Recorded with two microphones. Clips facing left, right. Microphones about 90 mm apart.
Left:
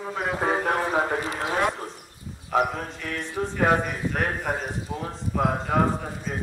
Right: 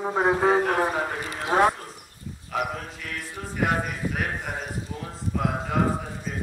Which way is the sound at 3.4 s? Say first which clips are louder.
Left 8 dB; 30° left (ahead or behind).